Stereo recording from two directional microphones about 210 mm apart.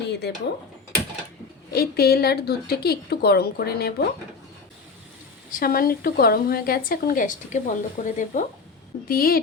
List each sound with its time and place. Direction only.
0.1 s speech: 50° left (ahead or behind)
1.7 s a woman's voice: 45° left (ahead or behind)
5.5 s a woman's voice: 40° left (ahead or behind)